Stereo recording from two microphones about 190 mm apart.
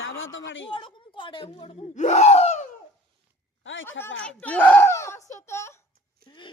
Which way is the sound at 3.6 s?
85° left.